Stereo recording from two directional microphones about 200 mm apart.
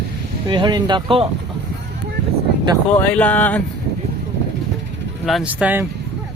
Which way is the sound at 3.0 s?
10° left (ahead or behind).